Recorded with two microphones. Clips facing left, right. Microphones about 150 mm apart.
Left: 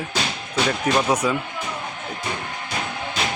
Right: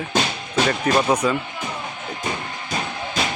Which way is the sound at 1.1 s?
10° left (ahead or behind).